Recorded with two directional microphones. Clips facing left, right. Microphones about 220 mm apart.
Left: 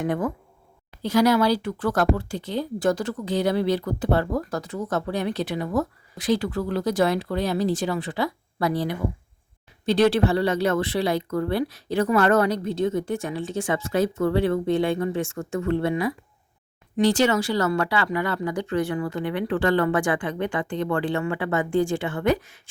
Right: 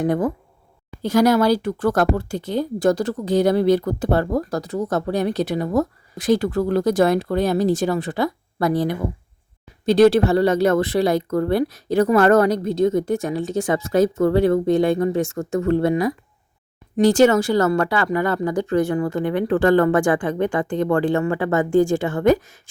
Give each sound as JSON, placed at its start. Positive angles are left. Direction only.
{"t": 0.0, "sound": "speech", "side_deg": -35}